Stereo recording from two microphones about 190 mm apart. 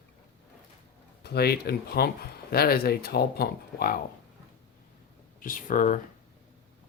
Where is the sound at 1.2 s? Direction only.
55° left (ahead or behind).